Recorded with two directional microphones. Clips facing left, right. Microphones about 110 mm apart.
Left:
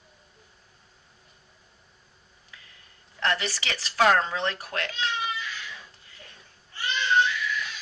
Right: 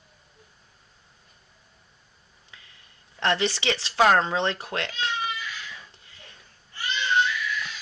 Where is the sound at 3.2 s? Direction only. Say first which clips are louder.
Right 3 dB; 25° right (ahead or behind).